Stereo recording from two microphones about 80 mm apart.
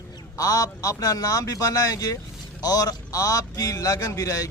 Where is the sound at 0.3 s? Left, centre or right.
Left.